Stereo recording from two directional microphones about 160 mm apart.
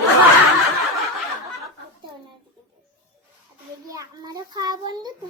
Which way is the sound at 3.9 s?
20° right (ahead or behind).